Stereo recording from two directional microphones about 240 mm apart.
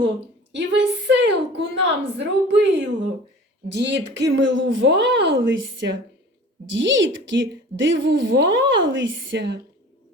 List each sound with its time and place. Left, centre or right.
0.5 s a woman's voice: right